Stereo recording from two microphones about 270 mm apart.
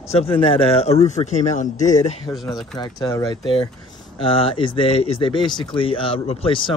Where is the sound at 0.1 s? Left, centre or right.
Left.